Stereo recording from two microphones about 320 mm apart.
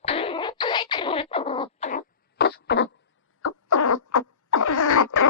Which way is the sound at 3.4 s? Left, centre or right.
Left.